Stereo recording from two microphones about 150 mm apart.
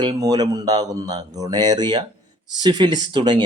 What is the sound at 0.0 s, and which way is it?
Speech, 30° right (ahead or behind).